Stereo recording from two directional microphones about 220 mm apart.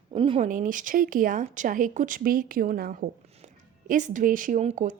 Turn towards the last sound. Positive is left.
turn(degrees=-30)  # may be behind; listen again after turning